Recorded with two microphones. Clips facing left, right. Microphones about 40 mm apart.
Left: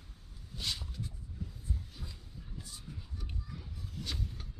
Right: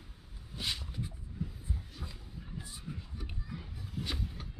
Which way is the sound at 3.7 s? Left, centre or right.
Centre.